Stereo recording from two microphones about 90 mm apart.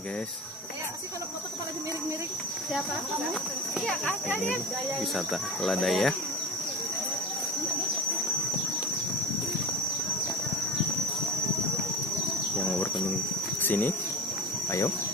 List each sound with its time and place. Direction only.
3.8 s speech: 5° left (ahead or behind)
13.6 s speech: 20° left (ahead or behind)